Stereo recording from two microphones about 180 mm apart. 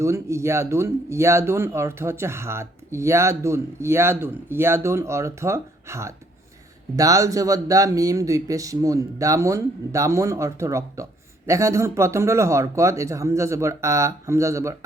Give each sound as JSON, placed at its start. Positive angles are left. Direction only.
{"t": 0.0, "sound": "speech", "side_deg": -15}